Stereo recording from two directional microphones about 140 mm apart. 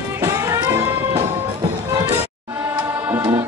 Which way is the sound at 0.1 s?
20° right (ahead or behind).